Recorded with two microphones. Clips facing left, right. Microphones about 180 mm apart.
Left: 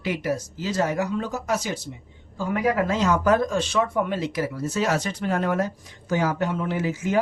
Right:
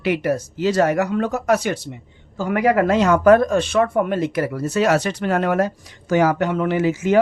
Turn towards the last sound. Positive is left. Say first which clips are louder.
# right 7 dB
turn(degrees=-75)  # may be behind; listen again after turning